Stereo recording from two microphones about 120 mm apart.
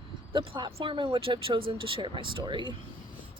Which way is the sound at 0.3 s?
45° right (ahead or behind).